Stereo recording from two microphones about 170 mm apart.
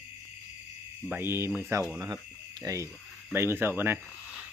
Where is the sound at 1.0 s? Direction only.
10° right (ahead or behind).